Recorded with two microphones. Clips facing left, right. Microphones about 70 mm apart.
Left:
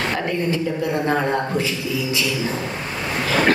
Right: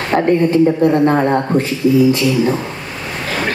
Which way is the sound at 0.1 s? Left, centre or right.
Right.